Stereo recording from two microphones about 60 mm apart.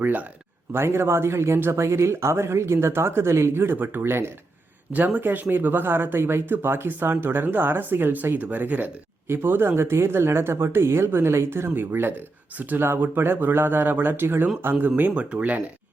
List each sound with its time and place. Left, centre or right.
0.0 s speech: right
0.7 s speech: right
4.9 s speech: right